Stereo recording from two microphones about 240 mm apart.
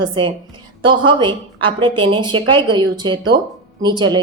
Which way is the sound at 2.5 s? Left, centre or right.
Centre.